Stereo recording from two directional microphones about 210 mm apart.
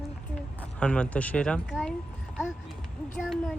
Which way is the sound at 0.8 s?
5° left (ahead or behind).